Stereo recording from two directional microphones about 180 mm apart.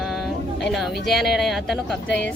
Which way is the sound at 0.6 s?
Centre (ahead or behind).